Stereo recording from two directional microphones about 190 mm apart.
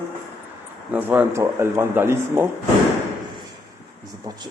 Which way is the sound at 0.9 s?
10° right (ahead or behind).